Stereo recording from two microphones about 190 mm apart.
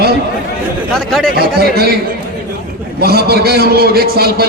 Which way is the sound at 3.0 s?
55° right (ahead or behind).